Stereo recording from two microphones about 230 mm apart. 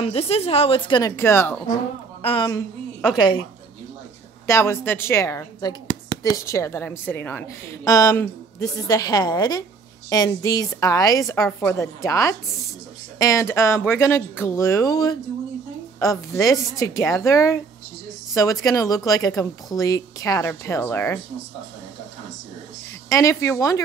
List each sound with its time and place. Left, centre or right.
0.0 s a woman's voice: left
4.5 s a woman's voice: centre
23.0 s a woman's voice: centre